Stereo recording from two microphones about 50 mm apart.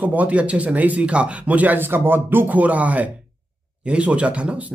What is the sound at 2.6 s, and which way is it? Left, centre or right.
Speech, right.